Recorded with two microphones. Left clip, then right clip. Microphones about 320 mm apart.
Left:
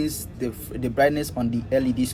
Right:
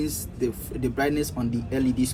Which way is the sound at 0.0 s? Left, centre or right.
Left.